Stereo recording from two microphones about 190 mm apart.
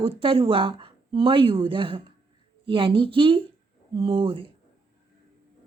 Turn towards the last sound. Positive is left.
turn(degrees=-25)  # may be behind; listen again after turning